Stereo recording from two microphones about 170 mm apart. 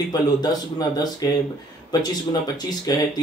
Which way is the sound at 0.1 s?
25° left (ahead or behind).